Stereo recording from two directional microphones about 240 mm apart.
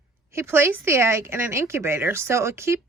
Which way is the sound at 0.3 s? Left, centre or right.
Centre.